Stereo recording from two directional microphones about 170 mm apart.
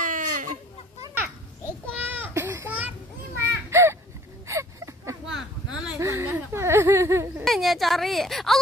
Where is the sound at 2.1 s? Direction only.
10° right (ahead or behind).